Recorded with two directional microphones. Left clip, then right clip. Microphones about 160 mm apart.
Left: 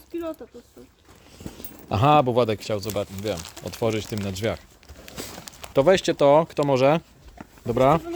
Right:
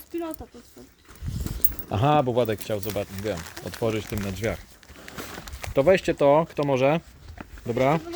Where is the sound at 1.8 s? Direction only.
25° left (ahead or behind).